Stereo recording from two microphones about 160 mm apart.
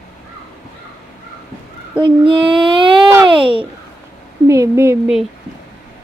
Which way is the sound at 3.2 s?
30° right (ahead or behind).